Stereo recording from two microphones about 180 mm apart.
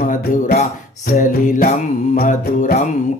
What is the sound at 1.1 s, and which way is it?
Music, 45° left (ahead or behind).